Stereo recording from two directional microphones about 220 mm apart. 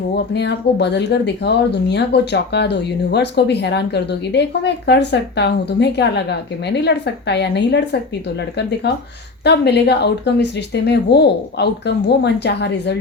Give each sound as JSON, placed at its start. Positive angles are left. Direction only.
{"t": 0.3, "sound": "speech", "side_deg": 50}
{"t": 9.4, "sound": "speech", "side_deg": 50}